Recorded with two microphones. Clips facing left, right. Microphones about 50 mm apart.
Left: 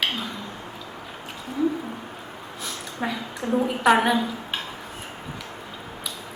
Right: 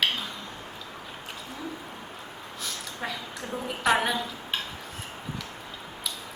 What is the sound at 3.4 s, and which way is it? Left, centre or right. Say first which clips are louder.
A woman's voice: left 7 dB; centre.